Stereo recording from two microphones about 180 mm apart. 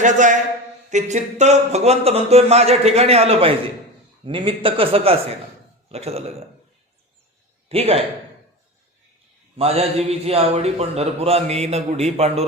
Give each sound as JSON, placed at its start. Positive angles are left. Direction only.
{"t": 0.0, "sound": "a man's voice", "side_deg": -45}
{"t": 7.7, "sound": "a man's voice", "side_deg": -35}
{"t": 9.6, "sound": "a man's voice", "side_deg": -35}